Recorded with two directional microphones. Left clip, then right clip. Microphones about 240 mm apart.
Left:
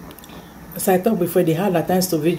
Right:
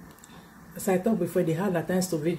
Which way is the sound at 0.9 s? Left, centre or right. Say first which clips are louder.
Left 8 dB; centre.